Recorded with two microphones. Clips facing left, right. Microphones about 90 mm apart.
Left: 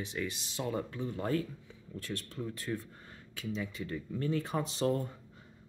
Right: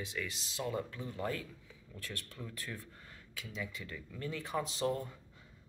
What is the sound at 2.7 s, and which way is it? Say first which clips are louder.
Speech: left 11 dB; 20° left (ahead or behind).